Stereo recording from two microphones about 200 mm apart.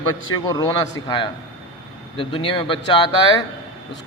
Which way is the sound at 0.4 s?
20° left (ahead or behind).